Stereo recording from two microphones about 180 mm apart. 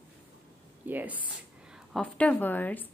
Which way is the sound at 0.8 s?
10° right (ahead or behind).